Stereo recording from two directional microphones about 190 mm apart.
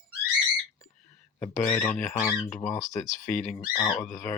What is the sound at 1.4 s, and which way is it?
Speech, 5° left (ahead or behind).